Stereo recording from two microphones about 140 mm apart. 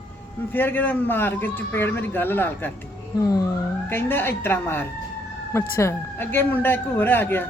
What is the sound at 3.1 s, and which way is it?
Speech, 25° left (ahead or behind).